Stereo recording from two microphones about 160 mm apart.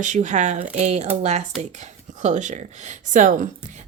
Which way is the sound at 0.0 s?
50° right (ahead or behind).